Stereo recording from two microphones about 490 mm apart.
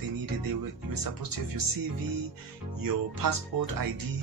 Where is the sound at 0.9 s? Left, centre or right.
Right.